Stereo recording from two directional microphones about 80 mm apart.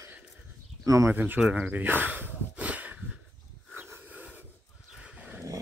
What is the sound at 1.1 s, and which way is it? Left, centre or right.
Speech, right.